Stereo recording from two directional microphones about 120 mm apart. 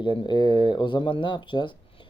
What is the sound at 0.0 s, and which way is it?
Speech, 40° left (ahead or behind).